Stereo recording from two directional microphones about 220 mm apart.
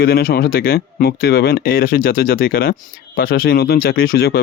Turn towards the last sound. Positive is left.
turn(degrees=45)  # may be behind; listen again after turning